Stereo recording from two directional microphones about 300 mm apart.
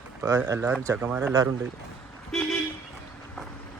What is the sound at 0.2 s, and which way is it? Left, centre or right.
Speech, centre.